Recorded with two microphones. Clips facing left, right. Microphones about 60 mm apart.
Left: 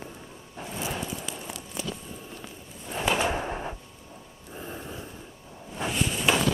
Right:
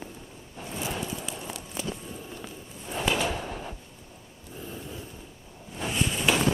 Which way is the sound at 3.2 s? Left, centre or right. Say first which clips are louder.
Left 3 dB; left.